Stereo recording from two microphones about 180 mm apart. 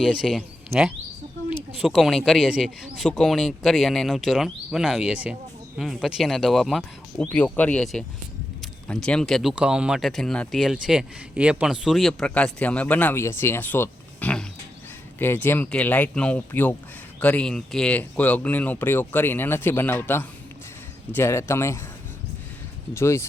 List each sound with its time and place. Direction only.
0.1 s speech: centre (ahead or behind); by 21.8 s 15° left (ahead or behind)
23.0 s speech: 15° left (ahead or behind)